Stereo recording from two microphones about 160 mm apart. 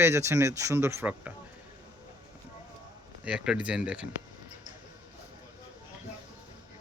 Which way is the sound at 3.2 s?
5° right (ahead or behind).